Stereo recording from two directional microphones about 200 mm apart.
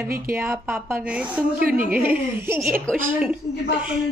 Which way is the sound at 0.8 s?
10° right (ahead or behind).